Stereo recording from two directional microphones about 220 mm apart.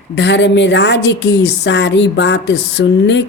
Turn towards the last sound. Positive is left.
turn(degrees=55)  # may be behind; listen again after turning